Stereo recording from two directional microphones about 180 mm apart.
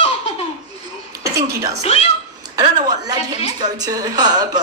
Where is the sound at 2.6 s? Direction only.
25° right (ahead or behind).